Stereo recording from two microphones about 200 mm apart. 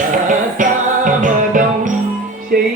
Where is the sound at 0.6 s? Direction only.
40° right (ahead or behind).